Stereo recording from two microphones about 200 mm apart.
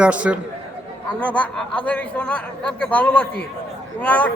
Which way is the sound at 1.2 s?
5° left (ahead or behind).